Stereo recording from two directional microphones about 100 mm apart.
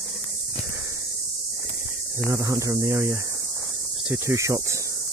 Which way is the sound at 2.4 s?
30° right (ahead or behind).